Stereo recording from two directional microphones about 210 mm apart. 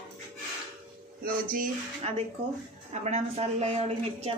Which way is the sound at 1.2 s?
40° right (ahead or behind).